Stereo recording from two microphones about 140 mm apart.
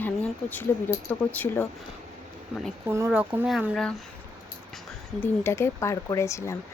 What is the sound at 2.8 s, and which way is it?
Speech, 15° right (ahead or behind).